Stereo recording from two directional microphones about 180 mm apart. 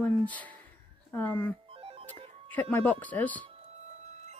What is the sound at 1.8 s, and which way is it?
Music, 30° right (ahead or behind).